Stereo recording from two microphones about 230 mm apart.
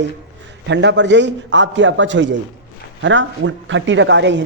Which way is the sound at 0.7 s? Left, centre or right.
Right.